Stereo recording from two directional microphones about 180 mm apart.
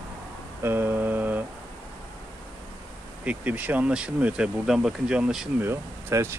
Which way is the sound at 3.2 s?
10° right (ahead or behind).